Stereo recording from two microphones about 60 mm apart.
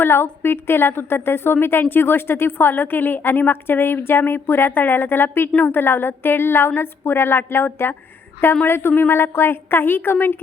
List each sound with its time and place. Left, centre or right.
0.0 s a woman's voice: left